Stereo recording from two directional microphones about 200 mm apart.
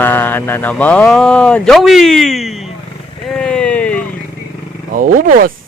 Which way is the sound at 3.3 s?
5° left (ahead or behind).